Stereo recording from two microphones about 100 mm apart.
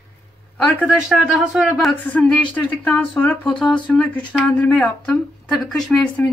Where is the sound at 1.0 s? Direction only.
Centre (ahead or behind).